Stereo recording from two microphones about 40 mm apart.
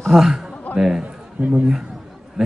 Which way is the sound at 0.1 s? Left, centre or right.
Centre.